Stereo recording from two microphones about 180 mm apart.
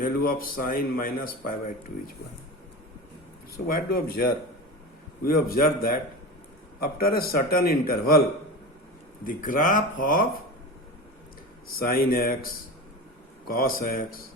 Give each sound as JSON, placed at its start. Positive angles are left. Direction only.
{"t": 0.0, "sound": "a man's voice", "side_deg": 55}
{"t": 3.7, "sound": "a man's voice", "side_deg": 60}
{"t": 9.2, "sound": "a man's voice", "side_deg": 45}
{"t": 11.8, "sound": "a man's voice", "side_deg": 55}
{"t": 13.6, "sound": "a man's voice", "side_deg": 55}